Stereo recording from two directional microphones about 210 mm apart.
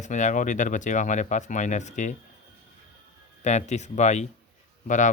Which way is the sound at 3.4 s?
35° left (ahead or behind).